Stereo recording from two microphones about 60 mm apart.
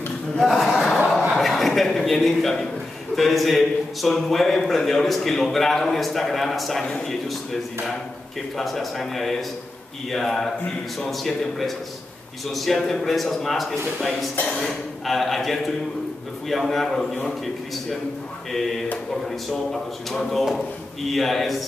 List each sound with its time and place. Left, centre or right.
0.4 s a sound: centre
3.2 s a man's voice: centre
8.5 s speech: centre
19.2 s speech: centre